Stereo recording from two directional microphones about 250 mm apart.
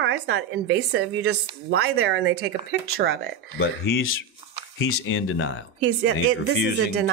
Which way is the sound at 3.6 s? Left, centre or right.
Left.